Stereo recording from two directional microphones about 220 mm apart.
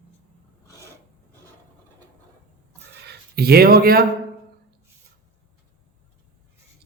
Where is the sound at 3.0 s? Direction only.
45° right (ahead or behind).